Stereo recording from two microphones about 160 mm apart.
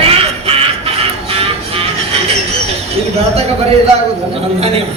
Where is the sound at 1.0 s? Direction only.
35° right (ahead or behind).